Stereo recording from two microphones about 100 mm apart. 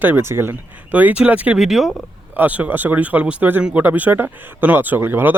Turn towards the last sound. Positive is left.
turn(degrees=-25)  # may be behind; listen again after turning